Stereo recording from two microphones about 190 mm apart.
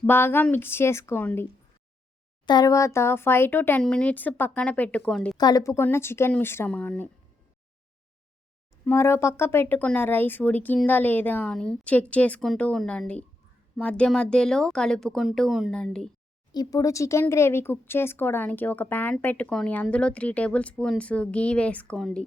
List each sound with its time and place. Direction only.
0.0 s speech: 10° left (ahead or behind)
2.5 s speech: 20° left (ahead or behind); by 5.4 s 5° left (ahead or behind)
5.4 s speech: 20° left (ahead or behind)
8.8 s speech: 10° left (ahead or behind)
16.5 s speech: 20° left (ahead or behind); by 22.2 s 5° left (ahead or behind)